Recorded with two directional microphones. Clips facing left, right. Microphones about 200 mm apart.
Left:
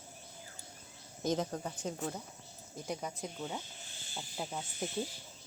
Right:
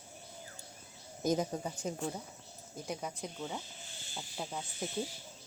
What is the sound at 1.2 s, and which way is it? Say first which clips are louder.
A woman's voice: right 2 dB; 10° right (ahead or behind).